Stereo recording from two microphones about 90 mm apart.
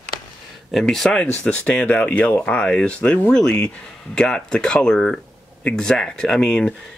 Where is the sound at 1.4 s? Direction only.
15° left (ahead or behind).